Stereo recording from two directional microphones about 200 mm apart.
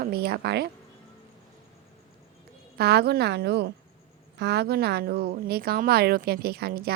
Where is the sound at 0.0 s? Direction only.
50° right (ahead or behind).